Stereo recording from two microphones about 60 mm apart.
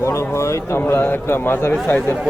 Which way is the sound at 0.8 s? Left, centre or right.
Left.